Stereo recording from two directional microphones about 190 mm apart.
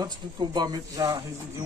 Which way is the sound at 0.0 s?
20° right (ahead or behind).